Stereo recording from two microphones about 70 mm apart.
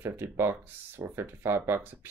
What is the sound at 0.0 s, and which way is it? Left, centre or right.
Speech, right.